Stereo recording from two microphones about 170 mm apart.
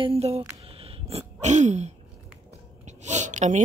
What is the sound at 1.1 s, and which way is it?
Sneeze, 45° right (ahead or behind).